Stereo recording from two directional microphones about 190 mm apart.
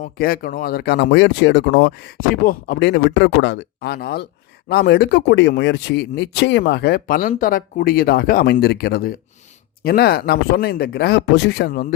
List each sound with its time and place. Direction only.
0.0 s speech: 50° left (ahead or behind)